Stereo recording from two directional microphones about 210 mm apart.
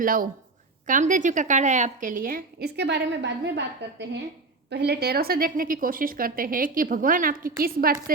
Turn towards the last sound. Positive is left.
turn(degrees=-45)  # may be behind; listen again after turning